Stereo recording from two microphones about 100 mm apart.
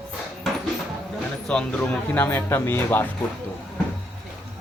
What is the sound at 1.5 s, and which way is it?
A man's voice, 15° left (ahead or behind).